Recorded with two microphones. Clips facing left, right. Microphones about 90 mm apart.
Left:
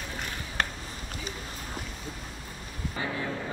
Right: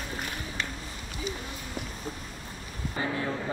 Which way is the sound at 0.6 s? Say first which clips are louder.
Left 6 dB; 50° left (ahead or behind).